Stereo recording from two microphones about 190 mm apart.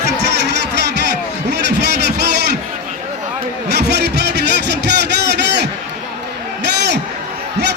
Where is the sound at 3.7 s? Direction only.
60° right (ahead or behind).